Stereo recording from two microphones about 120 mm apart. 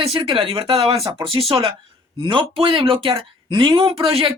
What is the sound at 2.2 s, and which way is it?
Speech, 40° right (ahead or behind).